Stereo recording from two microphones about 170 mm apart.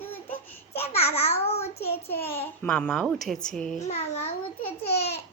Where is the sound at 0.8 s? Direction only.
35° left (ahead or behind).